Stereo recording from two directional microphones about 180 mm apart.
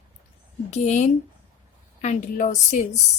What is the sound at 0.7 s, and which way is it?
A woman's voice, 40° left (ahead or behind).